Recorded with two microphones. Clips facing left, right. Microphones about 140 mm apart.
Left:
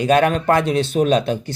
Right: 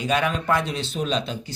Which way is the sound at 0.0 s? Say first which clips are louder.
Left 8 dB; 55° left (ahead or behind).